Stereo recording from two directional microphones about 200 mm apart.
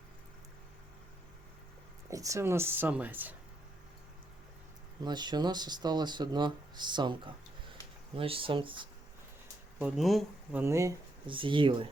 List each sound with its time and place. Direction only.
2.0 s speech: 15° right (ahead or behind)
5.0 s speech: 20° right (ahead or behind)
9.7 s speech: 5° right (ahead or behind)
10.6 s speech: 15° right (ahead or behind)
11.3 s speech: 25° right (ahead or behind)